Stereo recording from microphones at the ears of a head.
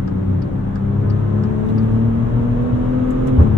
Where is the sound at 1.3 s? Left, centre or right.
Left.